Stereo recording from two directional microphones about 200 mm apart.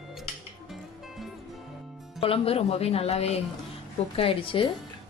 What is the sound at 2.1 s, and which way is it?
A woman's voice, 25° left (ahead or behind).